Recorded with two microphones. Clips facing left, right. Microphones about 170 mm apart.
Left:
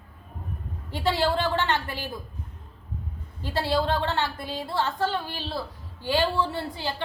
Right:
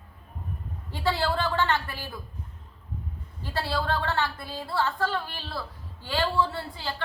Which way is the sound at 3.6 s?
20° left (ahead or behind).